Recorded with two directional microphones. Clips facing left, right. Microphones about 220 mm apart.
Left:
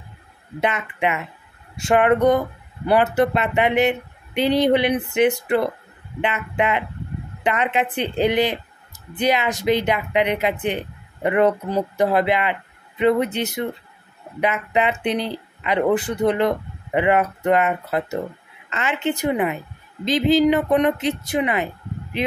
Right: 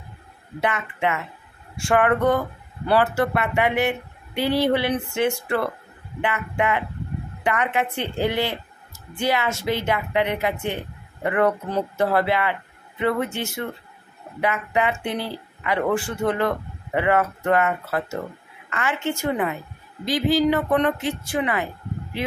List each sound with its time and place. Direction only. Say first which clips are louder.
0.6 s a woman's voice: left 2 dB; 20° left (ahead or behind)